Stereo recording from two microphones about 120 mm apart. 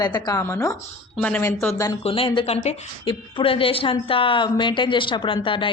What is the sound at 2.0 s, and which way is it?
Speech, 50° left (ahead or behind).